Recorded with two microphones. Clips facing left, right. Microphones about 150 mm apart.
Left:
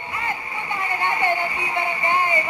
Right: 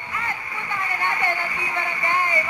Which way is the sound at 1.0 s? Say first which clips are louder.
Left 4 dB; 20° left (ahead or behind).